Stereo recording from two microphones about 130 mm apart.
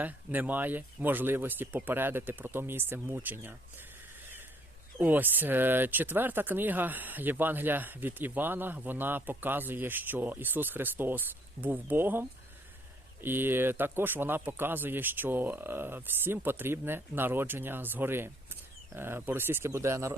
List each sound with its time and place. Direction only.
0.0 s speech: 15° right (ahead or behind)
4.9 s speech: 15° right (ahead or behind)
13.2 s speech: 15° right (ahead or behind)